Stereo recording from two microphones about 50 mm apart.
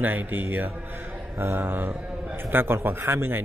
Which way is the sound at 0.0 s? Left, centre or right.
Right.